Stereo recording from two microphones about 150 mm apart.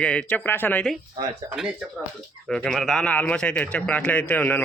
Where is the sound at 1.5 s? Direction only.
5° right (ahead or behind).